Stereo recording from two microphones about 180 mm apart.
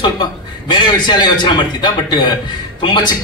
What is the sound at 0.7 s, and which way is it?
A man's voice, 25° left (ahead or behind).